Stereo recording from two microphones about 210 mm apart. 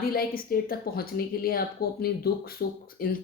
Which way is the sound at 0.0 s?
45° left (ahead or behind).